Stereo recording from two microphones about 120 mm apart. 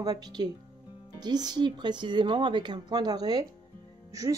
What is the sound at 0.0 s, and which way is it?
Speech, 35° right (ahead or behind).